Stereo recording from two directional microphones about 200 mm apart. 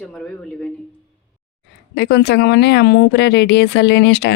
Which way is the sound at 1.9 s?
55° left (ahead or behind).